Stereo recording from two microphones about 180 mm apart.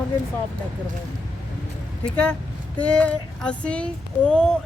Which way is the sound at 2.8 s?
5° left (ahead or behind).